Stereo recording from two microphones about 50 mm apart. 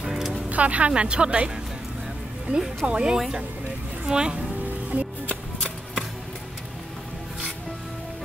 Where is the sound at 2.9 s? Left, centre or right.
Centre.